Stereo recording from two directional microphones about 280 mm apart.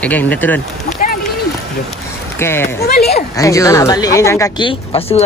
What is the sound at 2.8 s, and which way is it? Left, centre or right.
Speech, left.